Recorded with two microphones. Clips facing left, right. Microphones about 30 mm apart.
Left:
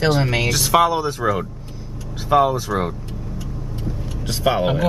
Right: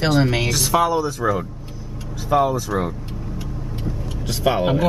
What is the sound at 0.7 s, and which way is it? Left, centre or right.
Speech, left.